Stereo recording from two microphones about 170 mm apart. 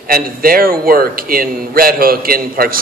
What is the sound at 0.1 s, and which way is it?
A man's voice, 60° right (ahead or behind).